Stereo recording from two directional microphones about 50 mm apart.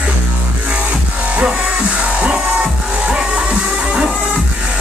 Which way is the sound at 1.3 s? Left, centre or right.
Right.